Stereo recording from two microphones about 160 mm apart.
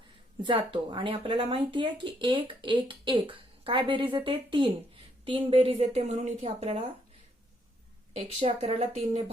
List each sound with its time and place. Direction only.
0.4 s speech: 30° right (ahead or behind)
8.1 s speech: 40° right (ahead or behind)